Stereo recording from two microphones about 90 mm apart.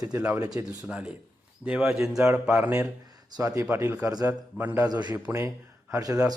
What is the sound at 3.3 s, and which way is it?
Speech, 40° right (ahead or behind).